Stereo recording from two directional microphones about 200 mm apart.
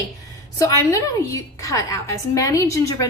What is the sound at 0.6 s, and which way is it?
A woman's voice, 15° left (ahead or behind).